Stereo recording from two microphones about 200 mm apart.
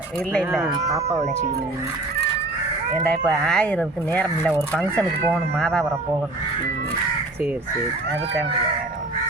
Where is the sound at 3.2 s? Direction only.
Centre (ahead or behind).